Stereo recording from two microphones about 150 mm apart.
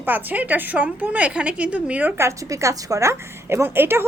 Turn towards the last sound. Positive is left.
turn(degrees=-15)  # may be behind; listen again after turning